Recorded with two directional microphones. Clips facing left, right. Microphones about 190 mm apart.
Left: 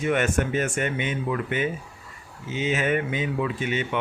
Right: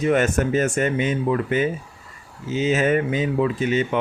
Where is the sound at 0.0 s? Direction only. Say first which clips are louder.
Right 4 dB; 35° right (ahead or behind).